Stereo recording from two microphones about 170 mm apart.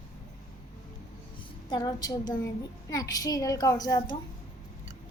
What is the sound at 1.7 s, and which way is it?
A woman's voice, 25° left (ahead or behind).